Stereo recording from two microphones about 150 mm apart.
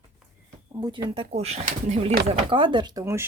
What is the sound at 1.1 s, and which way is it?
Speech, 45° right (ahead or behind).